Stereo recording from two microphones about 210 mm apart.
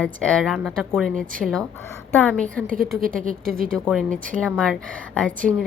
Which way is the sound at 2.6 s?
40° right (ahead or behind).